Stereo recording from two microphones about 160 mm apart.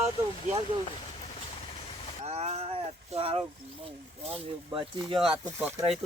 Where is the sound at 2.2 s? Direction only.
40° right (ahead or behind).